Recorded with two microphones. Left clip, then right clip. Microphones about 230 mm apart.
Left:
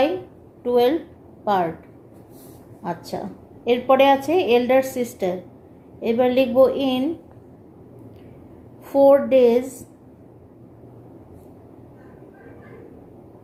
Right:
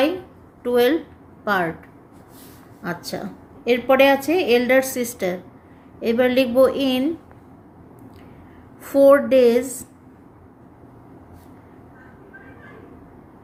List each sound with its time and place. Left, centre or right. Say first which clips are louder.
0.6 s a woman's voice: even; right
2.8 s a woman's voice: even; right
8.8 s a woman's voice: right 1 dB; right